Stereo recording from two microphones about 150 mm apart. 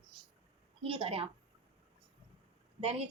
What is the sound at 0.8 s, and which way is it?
Speech, 35° right (ahead or behind).